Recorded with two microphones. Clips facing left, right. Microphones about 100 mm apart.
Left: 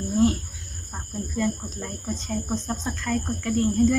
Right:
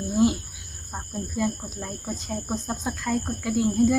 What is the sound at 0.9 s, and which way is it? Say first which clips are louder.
Speech: even; 5° right (ahead or behind).